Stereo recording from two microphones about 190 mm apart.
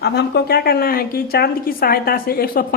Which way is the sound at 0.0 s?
60° left (ahead or behind).